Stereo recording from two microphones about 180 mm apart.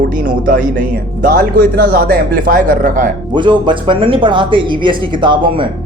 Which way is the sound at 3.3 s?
25° right (ahead or behind).